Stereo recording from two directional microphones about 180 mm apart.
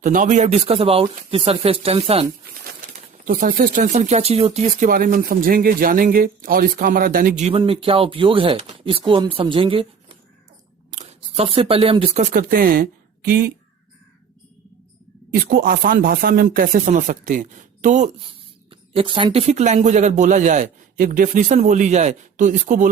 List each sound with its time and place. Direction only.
0.0 s speech: 45° right (ahead or behind)
3.2 s speech: 50° right (ahead or behind)
3.9 s speech: 35° right (ahead or behind); by 7.4 s 50° right (ahead or behind)
7.4 s speech: 30° right (ahead or behind); by 13.5 s 55° right (ahead or behind)
15.3 s speech: 60° right (ahead or behind); by 18.1 s 40° right (ahead or behind)
18.7 s speech: 30° right (ahead or behind); by 22.9 s 45° right (ahead or behind)